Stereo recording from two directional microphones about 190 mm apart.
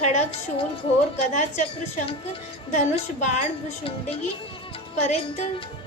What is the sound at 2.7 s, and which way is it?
Speech, 40° left (ahead or behind).